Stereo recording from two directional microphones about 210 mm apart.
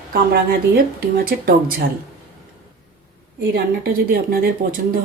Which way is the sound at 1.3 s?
45° right (ahead or behind).